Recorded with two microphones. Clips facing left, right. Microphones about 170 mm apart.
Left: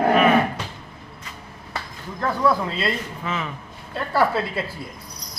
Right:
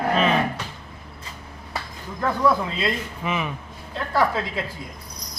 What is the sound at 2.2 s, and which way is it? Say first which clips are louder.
Speech: even; centre (ahead or behind).